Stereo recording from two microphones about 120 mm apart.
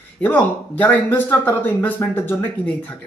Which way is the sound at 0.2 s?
15° left (ahead or behind).